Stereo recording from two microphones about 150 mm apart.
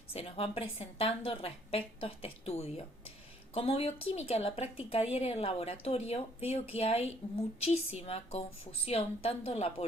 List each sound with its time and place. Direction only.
0.1 s a woman's voice: 40° left (ahead or behind)